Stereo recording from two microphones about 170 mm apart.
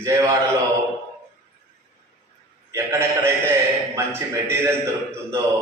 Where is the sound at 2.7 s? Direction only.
15° right (ahead or behind).